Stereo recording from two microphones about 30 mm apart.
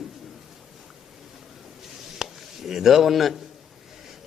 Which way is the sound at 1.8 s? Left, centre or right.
Centre.